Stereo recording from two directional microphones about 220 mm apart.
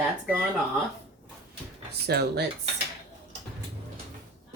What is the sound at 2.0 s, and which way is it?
Speech, 45° right (ahead or behind).